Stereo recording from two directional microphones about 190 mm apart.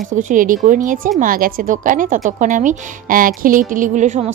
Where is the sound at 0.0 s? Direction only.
40° right (ahead or behind).